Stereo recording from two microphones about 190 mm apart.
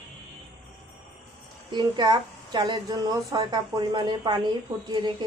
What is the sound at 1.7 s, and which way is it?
Speech, 25° right (ahead or behind).